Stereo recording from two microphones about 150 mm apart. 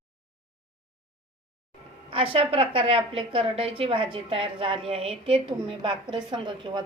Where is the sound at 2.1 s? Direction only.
35° right (ahead or behind).